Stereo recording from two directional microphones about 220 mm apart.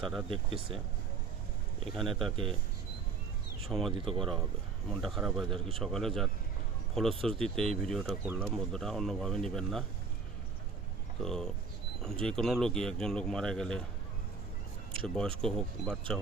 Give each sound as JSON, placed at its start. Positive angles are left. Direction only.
{"t": 0.0, "sound": "speech", "side_deg": 0}
{"t": 0.3, "sound": "speech", "side_deg": -25}
{"t": 1.8, "sound": "speech", "side_deg": 0}
{"t": 2.3, "sound": "speech", "side_deg": -25}
{"t": 3.7, "sound": "speech", "side_deg": 0}
{"t": 11.2, "sound": "speech", "side_deg": 0}
{"t": 15.0, "sound": "speech", "side_deg": 5}